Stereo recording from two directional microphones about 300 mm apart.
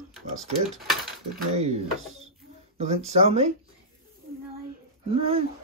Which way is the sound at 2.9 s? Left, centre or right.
Right.